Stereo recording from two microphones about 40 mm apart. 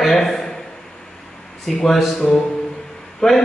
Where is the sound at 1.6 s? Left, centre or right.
Centre.